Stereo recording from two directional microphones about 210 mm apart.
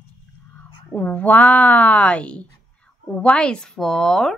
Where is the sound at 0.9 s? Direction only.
5° left (ahead or behind).